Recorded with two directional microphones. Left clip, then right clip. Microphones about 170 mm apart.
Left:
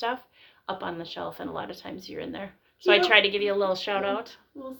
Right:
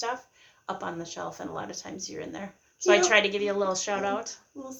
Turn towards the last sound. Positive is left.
turn(degrees=25)  # may be behind; listen again after turning